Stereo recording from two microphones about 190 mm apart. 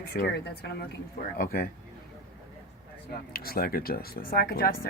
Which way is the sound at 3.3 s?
55° left (ahead or behind).